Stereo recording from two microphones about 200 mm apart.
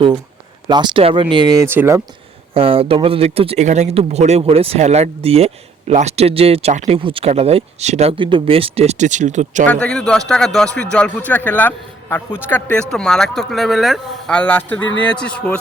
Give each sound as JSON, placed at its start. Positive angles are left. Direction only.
{"t": 0.7, "sound": "speech", "side_deg": -20}
{"t": 2.6, "sound": "speech", "side_deg": -25}
{"t": 9.6, "sound": "a man's voice", "side_deg": 5}